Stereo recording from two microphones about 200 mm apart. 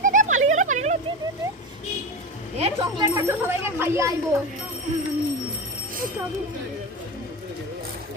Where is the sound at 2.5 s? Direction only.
25° right (ahead or behind).